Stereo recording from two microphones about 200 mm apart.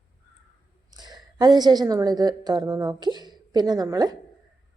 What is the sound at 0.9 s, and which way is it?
A woman's voice, 20° right (ahead or behind).